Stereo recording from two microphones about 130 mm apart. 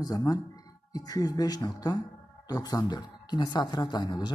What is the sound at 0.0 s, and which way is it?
Speech, 30° left (ahead or behind).